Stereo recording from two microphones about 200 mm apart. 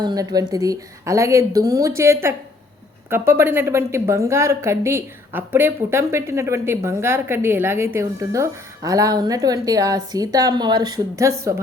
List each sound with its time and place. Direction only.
0.0 s a woman's voice: 20° right (ahead or behind)